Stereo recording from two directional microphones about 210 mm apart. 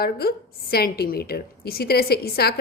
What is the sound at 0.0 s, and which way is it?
A woman's voice, 45° left (ahead or behind).